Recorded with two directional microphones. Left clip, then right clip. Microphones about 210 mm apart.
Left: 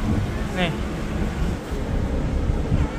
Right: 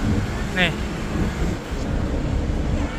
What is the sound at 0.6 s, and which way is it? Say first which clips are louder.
Speech: right 5 dB; 30° right (ahead or behind).